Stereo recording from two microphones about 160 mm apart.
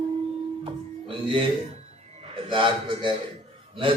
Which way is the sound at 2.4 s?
30° right (ahead or behind).